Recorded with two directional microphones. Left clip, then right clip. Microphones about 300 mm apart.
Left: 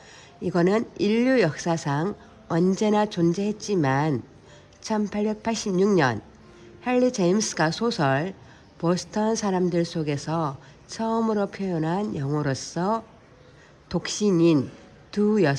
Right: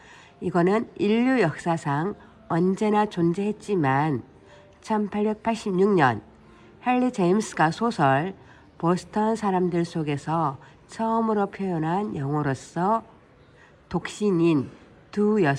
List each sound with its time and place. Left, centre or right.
0.4 s speech: centre